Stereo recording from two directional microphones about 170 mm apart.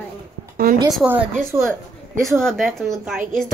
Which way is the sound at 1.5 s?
15° right (ahead or behind).